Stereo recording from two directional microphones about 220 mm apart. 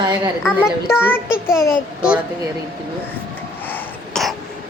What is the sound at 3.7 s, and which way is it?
Throat clearing, centre (ahead or behind).